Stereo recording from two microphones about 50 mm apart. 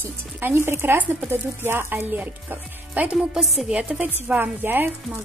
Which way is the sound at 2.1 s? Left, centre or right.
Right.